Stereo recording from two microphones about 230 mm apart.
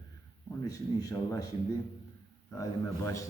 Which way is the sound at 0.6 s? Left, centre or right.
Centre.